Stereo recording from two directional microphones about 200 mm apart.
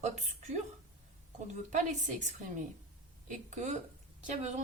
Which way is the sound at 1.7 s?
35° right (ahead or behind).